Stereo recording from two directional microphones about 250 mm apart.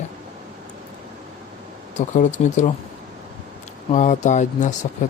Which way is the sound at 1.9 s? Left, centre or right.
Left.